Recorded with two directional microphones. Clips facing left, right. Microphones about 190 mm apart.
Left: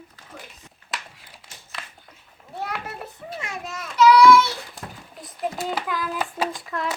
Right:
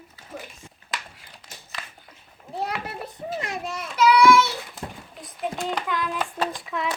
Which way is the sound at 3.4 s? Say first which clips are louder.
Even; 35° right (ahead or behind).